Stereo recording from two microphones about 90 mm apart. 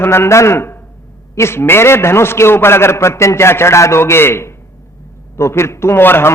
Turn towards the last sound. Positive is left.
turn(degrees=25)  # may be behind; listen again after turning